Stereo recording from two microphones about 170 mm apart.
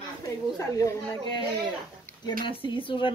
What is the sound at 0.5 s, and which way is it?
A woman's voice, 20° left (ahead or behind).